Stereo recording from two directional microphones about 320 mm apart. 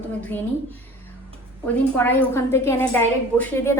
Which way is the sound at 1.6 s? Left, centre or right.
Centre.